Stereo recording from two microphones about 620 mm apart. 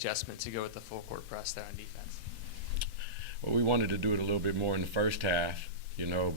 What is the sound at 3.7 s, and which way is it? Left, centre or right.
Speech, right.